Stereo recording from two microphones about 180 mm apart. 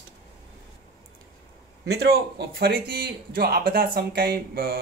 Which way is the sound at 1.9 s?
65° right (ahead or behind).